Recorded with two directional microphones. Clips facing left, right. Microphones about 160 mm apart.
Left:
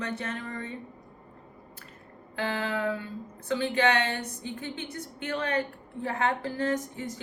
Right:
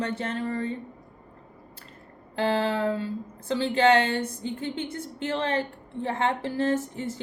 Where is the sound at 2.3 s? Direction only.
35° right (ahead or behind).